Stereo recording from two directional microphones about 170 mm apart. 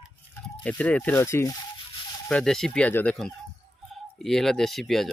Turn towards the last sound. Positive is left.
turn(degrees=0)  # may be behind; listen again after turning